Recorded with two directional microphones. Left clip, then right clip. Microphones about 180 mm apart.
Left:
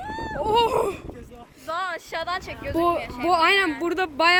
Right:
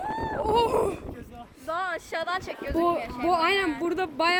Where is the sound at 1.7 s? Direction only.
45° right (ahead or behind); by 2.7 s 60° right (ahead or behind).